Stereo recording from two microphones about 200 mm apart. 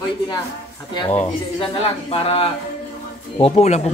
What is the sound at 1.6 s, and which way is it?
Speech, 30° left (ahead or behind).